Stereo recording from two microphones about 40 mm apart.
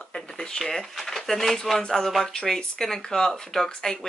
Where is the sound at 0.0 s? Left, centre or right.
Centre.